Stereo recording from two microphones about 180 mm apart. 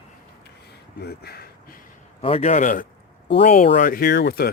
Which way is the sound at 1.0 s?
60° left (ahead or behind).